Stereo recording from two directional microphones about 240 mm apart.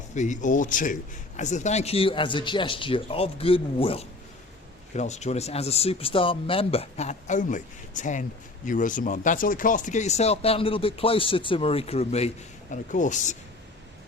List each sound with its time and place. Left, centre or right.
0.1 s speech: left